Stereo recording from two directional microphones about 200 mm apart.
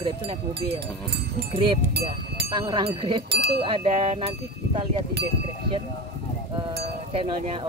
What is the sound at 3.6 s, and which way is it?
Speech, 30° right (ahead or behind).